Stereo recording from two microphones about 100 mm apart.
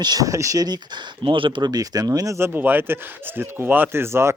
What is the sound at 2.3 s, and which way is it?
A man's voice, 20° right (ahead or behind).